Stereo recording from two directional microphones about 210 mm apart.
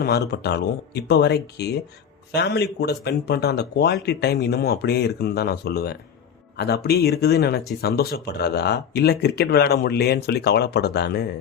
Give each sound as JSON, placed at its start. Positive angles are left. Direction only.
{"t": 0.0, "sound": "speech", "side_deg": 50}